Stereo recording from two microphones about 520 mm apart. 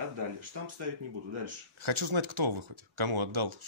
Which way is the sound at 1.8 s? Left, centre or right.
Right.